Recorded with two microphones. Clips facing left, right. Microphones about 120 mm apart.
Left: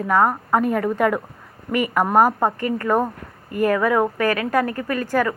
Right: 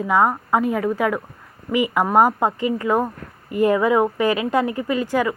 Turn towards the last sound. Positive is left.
turn(degrees=-15)  # may be behind; listen again after turning